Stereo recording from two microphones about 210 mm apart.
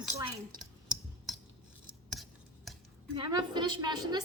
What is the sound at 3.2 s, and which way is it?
A woman's voice, 20° right (ahead or behind).